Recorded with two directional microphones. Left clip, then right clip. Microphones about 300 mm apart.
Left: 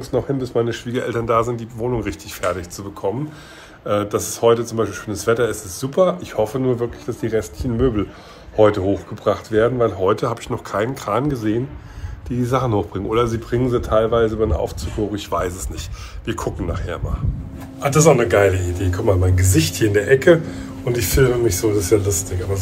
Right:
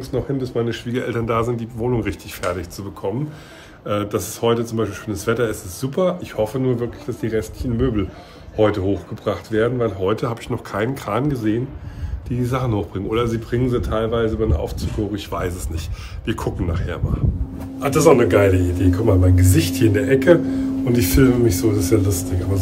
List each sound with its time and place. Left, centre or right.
0.1 s speech: centre